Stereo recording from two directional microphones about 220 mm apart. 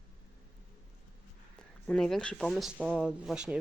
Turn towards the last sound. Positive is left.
turn(degrees=-5)  # may be behind; listen again after turning